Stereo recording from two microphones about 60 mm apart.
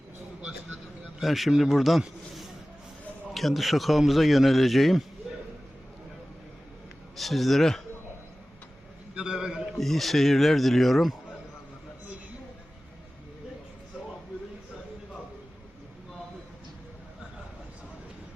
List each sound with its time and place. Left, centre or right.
1.2 s speech: centre
7.2 s speech: centre
9.1 s a man's voice: centre
9.7 s speech: centre